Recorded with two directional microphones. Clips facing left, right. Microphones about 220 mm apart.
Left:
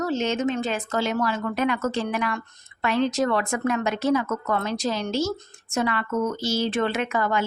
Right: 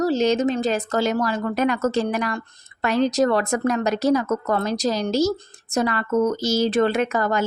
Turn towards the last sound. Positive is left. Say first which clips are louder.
# right 3 dB
turn(degrees=-40)  # may be behind; listen again after turning